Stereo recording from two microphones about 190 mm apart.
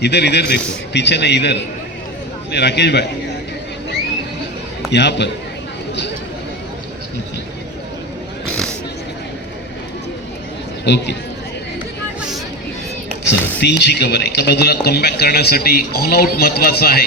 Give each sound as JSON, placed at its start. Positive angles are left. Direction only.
{"t": 0.0, "sound": "speech", "side_deg": 60}
{"t": 4.9, "sound": "speech", "side_deg": 65}
{"t": 8.4, "sound": "a sound", "side_deg": 5}
{"t": 10.8, "sound": "speech", "side_deg": 60}
{"t": 13.6, "sound": "speech", "side_deg": 60}